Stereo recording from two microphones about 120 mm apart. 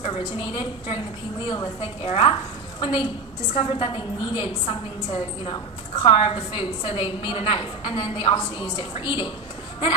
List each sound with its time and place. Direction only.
0.0 s a woman's voice: 45° left (ahead or behind)